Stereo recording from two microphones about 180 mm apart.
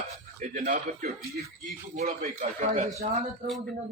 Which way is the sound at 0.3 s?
45° right (ahead or behind).